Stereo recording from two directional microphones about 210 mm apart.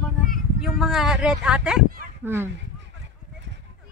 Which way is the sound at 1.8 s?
45° right (ahead or behind).